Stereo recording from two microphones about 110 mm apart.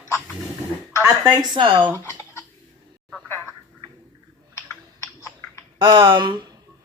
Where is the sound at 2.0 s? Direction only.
25° left (ahead or behind).